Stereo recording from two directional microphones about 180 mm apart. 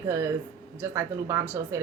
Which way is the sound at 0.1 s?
15° right (ahead or behind).